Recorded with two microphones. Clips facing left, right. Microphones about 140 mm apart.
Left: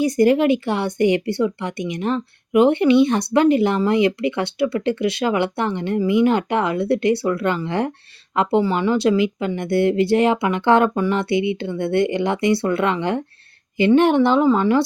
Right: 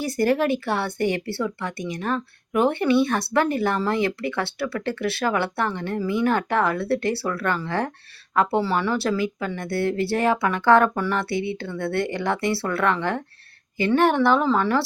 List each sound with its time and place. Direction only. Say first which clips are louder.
0.0 s speech: left 6 dB; 15° left (ahead or behind)